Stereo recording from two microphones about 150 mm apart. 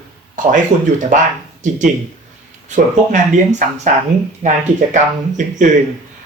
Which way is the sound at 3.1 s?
55° right (ahead or behind).